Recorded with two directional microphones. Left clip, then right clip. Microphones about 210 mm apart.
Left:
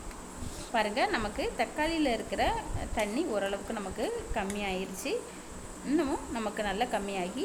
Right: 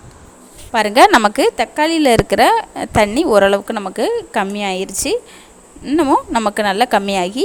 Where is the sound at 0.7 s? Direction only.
50° right (ahead or behind).